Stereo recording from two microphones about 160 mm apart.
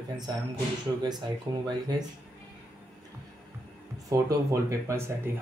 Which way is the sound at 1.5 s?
30° right (ahead or behind).